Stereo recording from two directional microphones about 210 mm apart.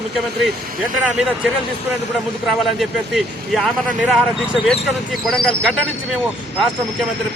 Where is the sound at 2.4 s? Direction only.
Centre (ahead or behind).